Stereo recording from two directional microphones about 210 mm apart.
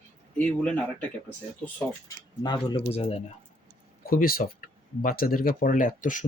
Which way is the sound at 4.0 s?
45° left (ahead or behind).